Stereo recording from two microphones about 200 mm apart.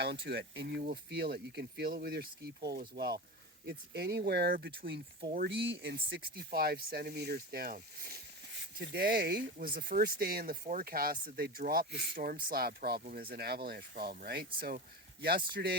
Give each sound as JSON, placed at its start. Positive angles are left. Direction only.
{"t": 0.0, "sound": "speech", "side_deg": -55}